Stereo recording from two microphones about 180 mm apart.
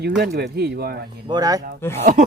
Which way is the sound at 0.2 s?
60° right (ahead or behind).